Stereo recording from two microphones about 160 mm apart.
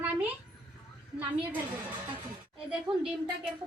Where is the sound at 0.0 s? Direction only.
10° right (ahead or behind).